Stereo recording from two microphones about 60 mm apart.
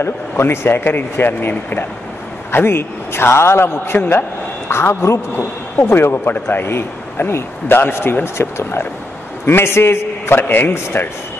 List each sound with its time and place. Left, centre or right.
0.0 s a man's voice: left
5.3 s speech: left